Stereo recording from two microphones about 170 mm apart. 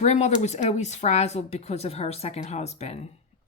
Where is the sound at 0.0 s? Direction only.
40° left (ahead or behind).